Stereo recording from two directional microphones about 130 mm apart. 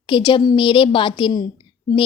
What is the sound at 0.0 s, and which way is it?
A woman's voice, 40° left (ahead or behind).